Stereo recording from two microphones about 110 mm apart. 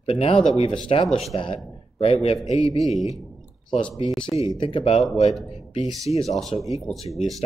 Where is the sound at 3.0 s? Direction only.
Centre (ahead or behind).